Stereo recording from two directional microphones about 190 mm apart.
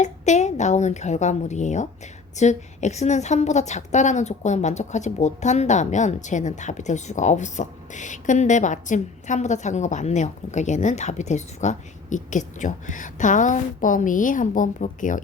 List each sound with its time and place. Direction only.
0.0 s a woman's voice: 40° left (ahead or behind)